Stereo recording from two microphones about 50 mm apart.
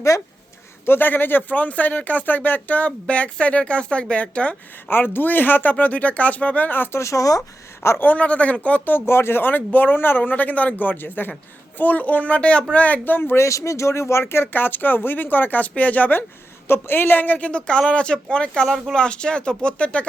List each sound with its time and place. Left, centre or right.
0.9 s speech: left
4.9 s speech: left
5.7 s speech: left
6.9 s speech: left
7.9 s speech: left
9.0 s speech: left
9.4 s speech: left
13.3 s speech: left
14.4 s speech: left
16.6 s speech: left
17.5 s speech: left